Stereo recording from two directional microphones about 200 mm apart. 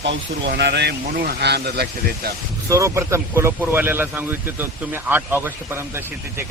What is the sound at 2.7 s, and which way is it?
Speech, 15° right (ahead or behind).